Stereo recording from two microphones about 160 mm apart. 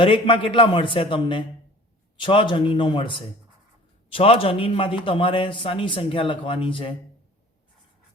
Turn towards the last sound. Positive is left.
turn(degrees=35)  # may be behind; listen again after turning